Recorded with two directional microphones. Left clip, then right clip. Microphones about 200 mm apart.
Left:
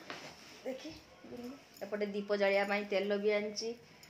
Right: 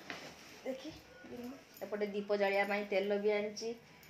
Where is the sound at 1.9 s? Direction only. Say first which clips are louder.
Even; 10° left (ahead or behind).